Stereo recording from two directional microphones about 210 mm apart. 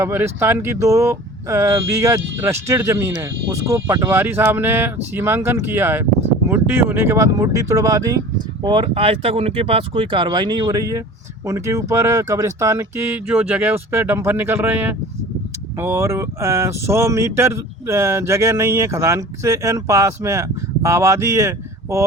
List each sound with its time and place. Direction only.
0.0 s speech: 10° right (ahead or behind)